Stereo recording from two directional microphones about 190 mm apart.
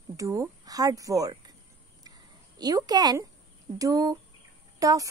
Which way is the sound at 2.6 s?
20° right (ahead or behind).